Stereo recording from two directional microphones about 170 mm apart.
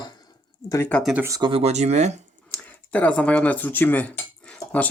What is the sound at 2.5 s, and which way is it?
Cutlery, 10° left (ahead or behind).